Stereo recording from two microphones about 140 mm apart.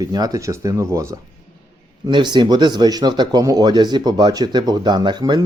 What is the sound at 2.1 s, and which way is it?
Speech, 30° right (ahead or behind).